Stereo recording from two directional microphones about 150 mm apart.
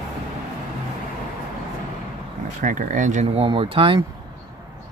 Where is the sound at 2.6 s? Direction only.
60° right (ahead or behind).